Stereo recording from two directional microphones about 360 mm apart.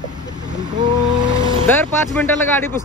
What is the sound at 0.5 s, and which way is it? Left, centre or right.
Vehicle, centre.